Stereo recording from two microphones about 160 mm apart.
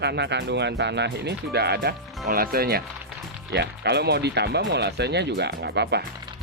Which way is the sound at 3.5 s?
90° right.